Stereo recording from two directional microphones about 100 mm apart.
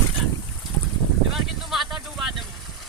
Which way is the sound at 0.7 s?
25° left (ahead or behind).